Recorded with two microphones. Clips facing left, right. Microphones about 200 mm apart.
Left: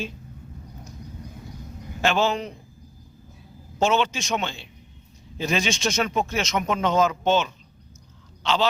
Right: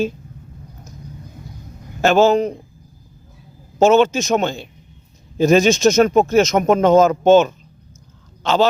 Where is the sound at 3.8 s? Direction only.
45° right (ahead or behind).